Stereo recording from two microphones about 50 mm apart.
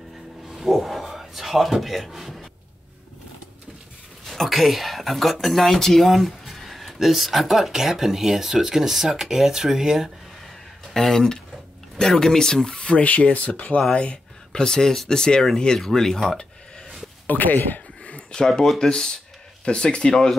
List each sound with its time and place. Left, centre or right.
0.5 s a sound: centre
4.3 s speech: centre
10.9 s speech: centre; by 13.7 s left
13.9 s speech: centre
17.3 s speech: left
18.0 s a sound: left
18.5 s speech: centre
18.8 s speech: centre